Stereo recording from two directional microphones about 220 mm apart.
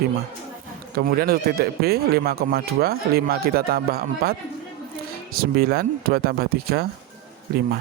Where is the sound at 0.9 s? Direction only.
45° right (ahead or behind).